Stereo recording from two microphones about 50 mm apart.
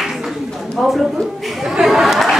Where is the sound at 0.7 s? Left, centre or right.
Centre.